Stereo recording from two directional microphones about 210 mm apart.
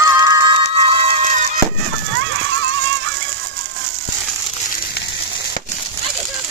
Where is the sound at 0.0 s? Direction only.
15° right (ahead or behind).